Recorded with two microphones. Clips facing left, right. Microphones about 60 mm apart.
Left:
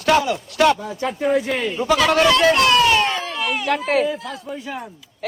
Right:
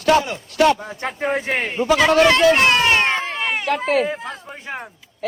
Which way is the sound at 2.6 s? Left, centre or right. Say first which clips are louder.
Left 1 dB; right.